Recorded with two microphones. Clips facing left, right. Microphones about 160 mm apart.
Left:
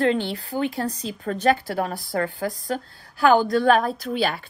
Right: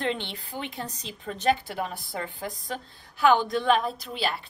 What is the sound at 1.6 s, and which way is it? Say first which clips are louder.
A woman's voice: left 6 dB; 40° left (ahead or behind).